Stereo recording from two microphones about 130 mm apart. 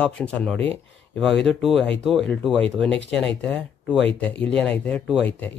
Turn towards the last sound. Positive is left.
turn(degrees=15)  # may be behind; listen again after turning